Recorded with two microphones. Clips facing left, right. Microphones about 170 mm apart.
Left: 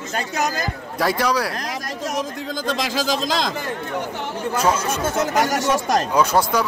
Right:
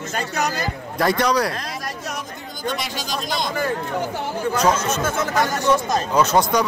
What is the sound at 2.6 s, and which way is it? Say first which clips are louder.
Speech: left 4 dB; 90° left.